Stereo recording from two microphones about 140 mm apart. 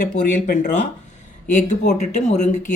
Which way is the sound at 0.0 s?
80° left.